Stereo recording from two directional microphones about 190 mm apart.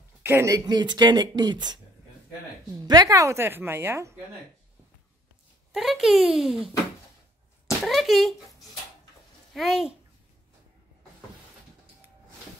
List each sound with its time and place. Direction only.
0.2 s speech: 15° right (ahead or behind)
2.8 s a woman's voice: 20° right (ahead or behind)
5.7 s speech: centre (ahead or behind)
7.8 s speech: centre (ahead or behind)